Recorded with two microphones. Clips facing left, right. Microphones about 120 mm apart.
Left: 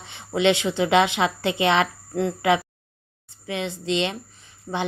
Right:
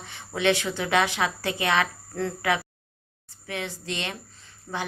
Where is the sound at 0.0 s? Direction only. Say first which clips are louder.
Left 4 dB; 20° left (ahead or behind).